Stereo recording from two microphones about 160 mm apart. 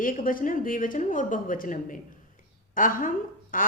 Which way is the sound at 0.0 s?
60° left (ahead or behind).